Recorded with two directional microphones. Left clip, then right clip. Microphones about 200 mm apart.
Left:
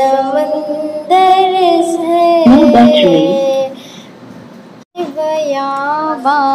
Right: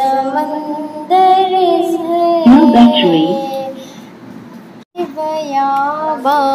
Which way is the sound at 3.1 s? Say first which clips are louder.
Left 3 dB; 25° left (ahead or behind).